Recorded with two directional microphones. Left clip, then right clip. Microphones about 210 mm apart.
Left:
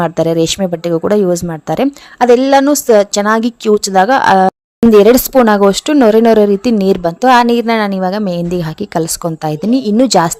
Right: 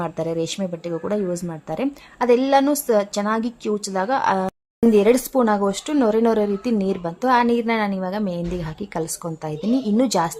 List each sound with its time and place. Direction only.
0.0 s speech: 40° left (ahead or behind)